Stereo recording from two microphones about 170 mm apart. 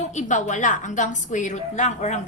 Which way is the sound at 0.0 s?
45° left (ahead or behind).